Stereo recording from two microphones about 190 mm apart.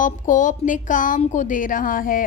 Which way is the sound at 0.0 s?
45° left (ahead or behind).